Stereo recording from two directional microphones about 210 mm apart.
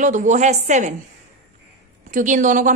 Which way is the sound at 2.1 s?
35° right (ahead or behind).